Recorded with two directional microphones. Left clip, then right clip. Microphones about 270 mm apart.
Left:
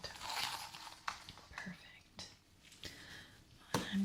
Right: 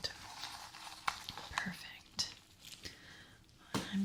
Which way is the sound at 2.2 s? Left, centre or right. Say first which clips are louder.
Right 12 dB; centre.